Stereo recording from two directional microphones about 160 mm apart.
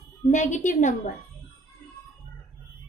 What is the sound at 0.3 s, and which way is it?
Speech, 50° left (ahead or behind).